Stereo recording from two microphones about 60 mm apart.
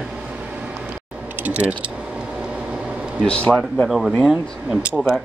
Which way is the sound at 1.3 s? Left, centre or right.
Right.